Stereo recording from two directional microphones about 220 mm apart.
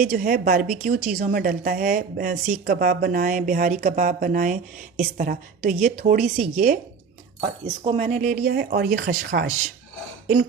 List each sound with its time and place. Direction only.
0.0 s a woman's voice: 40° right (ahead or behind)
7.9 s a woman's voice: 30° right (ahead or behind)